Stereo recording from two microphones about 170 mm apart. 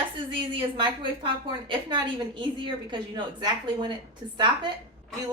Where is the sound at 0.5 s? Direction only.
30° right (ahead or behind).